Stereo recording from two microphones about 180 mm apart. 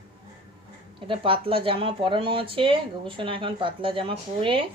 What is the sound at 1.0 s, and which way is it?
Speech, 30° right (ahead or behind).